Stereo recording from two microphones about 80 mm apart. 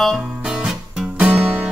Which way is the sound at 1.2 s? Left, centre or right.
Centre.